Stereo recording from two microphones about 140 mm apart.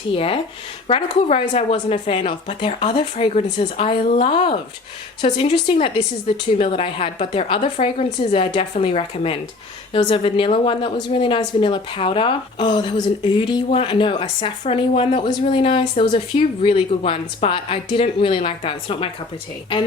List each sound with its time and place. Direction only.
0.1 s a woman's voice: 40° left (ahead or behind)